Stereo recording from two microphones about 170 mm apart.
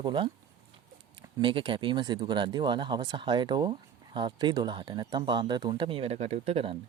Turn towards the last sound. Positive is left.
turn(degrees=-35)  # may be behind; listen again after turning